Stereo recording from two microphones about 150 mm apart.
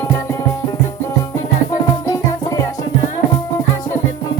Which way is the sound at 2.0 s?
25° left (ahead or behind).